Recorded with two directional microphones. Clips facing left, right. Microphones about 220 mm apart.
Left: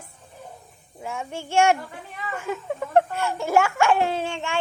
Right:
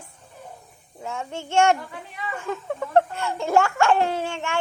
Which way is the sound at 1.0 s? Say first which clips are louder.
Even; 15° left (ahead or behind).